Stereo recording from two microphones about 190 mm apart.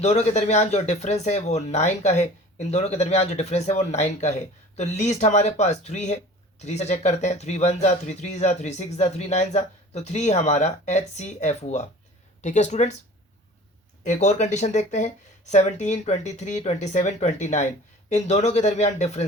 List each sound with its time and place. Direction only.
0.0 s speech: 35° left (ahead or behind)
14.0 s speech: 40° left (ahead or behind)